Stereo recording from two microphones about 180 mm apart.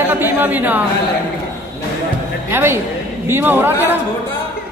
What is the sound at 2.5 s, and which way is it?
A man's voice, 15° right (ahead or behind).